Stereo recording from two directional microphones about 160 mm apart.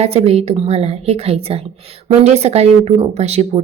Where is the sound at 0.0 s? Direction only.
40° right (ahead or behind).